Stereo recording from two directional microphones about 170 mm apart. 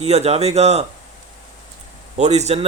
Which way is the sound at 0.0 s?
40° right (ahead or behind).